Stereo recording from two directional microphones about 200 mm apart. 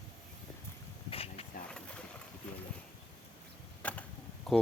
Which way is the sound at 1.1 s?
30° left (ahead or behind).